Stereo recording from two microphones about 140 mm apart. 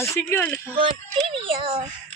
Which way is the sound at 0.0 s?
20° left (ahead or behind).